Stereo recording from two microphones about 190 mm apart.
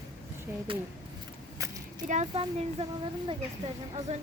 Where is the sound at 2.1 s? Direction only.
35° right (ahead or behind).